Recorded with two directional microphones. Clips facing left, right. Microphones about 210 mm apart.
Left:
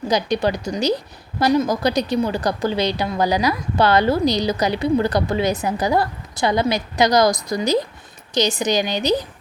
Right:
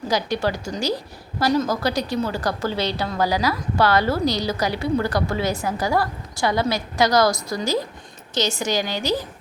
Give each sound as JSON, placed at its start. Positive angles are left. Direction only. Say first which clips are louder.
{"t": 0.1, "sound": "a woman's voice", "louder": "left 3 dB", "side_deg": 20}